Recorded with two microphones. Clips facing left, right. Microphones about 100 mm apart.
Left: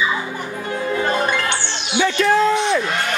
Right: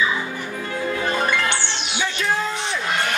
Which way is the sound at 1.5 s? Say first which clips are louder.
Left 2 dB; 15° left (ahead or behind).